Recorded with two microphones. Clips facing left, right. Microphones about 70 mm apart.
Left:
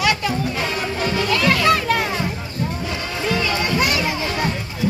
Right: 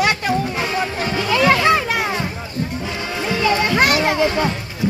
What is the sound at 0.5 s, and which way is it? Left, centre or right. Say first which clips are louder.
Music: right 2 dB; right.